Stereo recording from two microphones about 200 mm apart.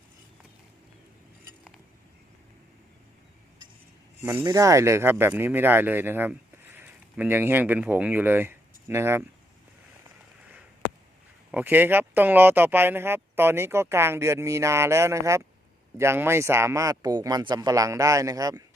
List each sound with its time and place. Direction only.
4.2 s speech: 10° right (ahead or behind)
11.5 s speech: 10° right (ahead or behind)